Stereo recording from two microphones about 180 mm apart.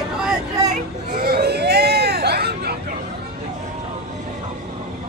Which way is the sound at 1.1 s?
60° right (ahead or behind).